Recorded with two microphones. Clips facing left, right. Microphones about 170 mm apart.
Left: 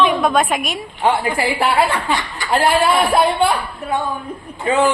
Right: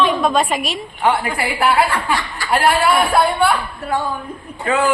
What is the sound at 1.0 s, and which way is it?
A man's voice, 20° left (ahead or behind).